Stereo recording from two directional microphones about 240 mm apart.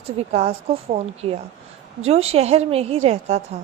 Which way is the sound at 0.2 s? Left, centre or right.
Right.